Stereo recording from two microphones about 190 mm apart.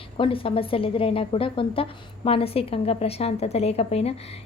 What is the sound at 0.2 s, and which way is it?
A woman's voice, 30° left (ahead or behind).